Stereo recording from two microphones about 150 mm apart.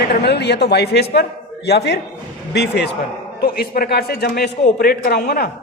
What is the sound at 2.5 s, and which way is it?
A man's voice, 90° left.